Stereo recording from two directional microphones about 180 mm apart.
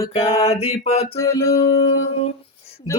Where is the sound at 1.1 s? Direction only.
15° left (ahead or behind).